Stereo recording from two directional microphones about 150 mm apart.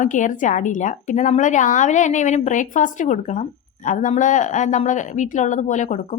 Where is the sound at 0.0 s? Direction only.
55° left (ahead or behind).